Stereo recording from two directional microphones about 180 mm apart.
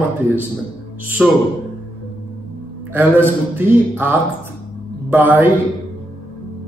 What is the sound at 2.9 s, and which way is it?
Speech, 10° right (ahead or behind).